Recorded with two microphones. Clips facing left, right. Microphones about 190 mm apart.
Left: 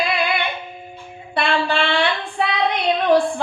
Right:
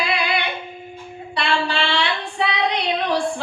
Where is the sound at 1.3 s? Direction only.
55° left (ahead or behind).